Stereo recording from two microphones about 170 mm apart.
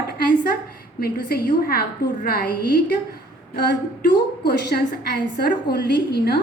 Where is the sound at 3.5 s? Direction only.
70° left (ahead or behind).